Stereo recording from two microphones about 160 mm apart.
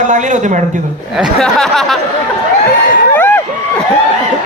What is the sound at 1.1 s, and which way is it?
Speech, centre (ahead or behind).